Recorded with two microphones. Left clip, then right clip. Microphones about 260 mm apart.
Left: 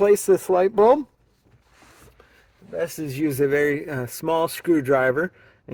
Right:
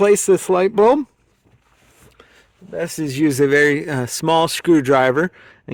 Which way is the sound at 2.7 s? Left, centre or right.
Right.